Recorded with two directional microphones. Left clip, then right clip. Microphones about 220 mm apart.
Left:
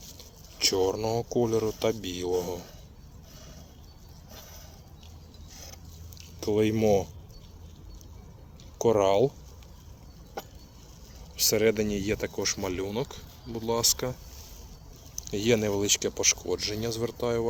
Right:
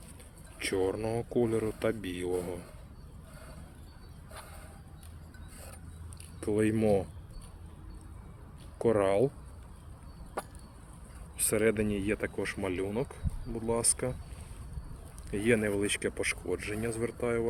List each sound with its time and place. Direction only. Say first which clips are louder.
0.6 s speech: left 5 dB; 10° left (ahead or behind)
6.4 s speech: left 4 dB; 15° left (ahead or behind)
8.8 s speech: left 4 dB; 10° left (ahead or behind)
11.3 s speech: left 4 dB; 10° left (ahead or behind)
15.3 s speech: left 3 dB; 15° left (ahead or behind)